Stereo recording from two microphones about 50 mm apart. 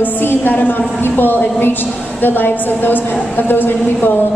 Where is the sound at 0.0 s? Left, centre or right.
Left.